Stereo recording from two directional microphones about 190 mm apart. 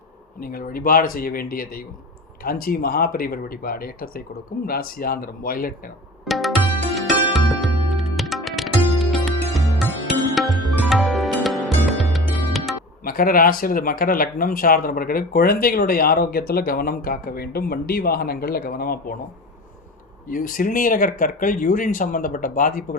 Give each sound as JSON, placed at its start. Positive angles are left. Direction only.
{"t": 0.3, "sound": "speech", "side_deg": 50}
{"t": 6.2, "sound": "music", "side_deg": 0}
{"t": 13.1, "sound": "speech", "side_deg": 50}
{"t": 20.3, "sound": "speech", "side_deg": 45}